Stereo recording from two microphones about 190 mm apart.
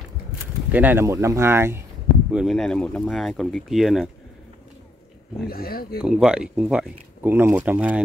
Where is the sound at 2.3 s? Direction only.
Centre (ahead or behind).